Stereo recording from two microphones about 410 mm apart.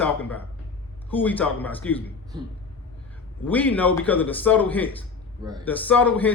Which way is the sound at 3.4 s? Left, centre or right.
Centre.